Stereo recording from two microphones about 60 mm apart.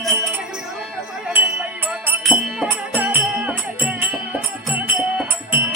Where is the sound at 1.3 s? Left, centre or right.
Right.